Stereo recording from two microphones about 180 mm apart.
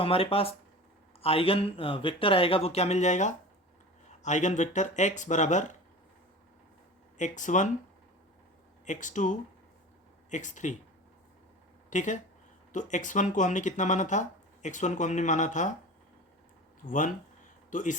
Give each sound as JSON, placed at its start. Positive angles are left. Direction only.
{"t": 0.0, "sound": "speech", "side_deg": 30}
{"t": 7.2, "sound": "speech", "side_deg": 45}
{"t": 8.9, "sound": "speech", "side_deg": 45}
{"t": 11.9, "sound": "speech", "side_deg": 45}
{"t": 16.8, "sound": "speech", "side_deg": 45}